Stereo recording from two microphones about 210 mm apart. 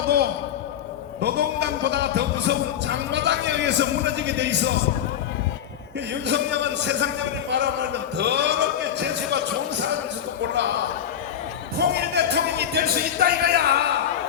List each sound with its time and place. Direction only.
1.2 s a man's voice: 50° right (ahead or behind)
6.2 s a man's voice: 55° right (ahead or behind)
11.8 s speech: 50° right (ahead or behind)